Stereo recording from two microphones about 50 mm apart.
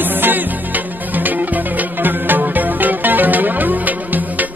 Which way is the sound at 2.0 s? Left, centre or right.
Right.